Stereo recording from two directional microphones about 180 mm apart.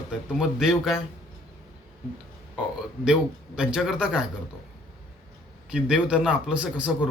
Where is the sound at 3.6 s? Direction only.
5° right (ahead or behind).